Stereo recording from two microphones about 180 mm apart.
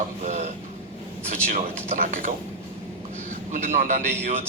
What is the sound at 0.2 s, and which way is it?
Speech, 40° right (ahead or behind).